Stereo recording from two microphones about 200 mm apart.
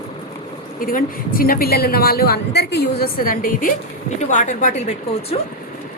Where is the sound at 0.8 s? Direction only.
45° left (ahead or behind).